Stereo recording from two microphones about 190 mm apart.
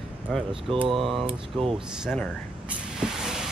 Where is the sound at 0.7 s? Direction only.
30° right (ahead or behind).